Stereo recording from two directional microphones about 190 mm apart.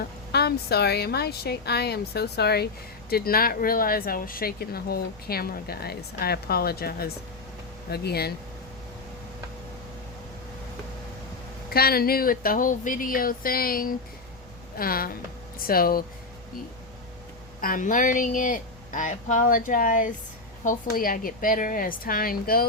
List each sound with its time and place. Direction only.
0.0 s a woman's voice: 60° left (ahead or behind)
11.7 s speech: 55° left (ahead or behind)
17.6 s speech: 45° left (ahead or behind)